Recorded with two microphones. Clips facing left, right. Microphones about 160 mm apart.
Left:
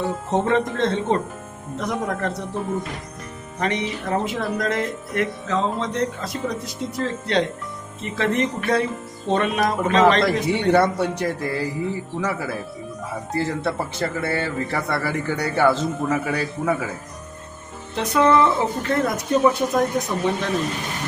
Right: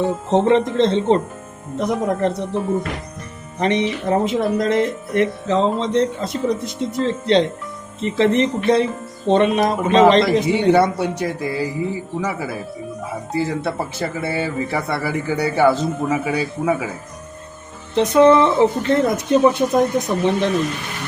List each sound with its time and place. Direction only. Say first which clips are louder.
0.3 s speech: right 5 dB; 20° right (ahead or behind)
3.6 s speech: right 6 dB; 25° right (ahead or behind)
10.4 s speech: right 3 dB; 5° right (ahead or behind)
17.9 s speech: right 6 dB; 25° right (ahead or behind)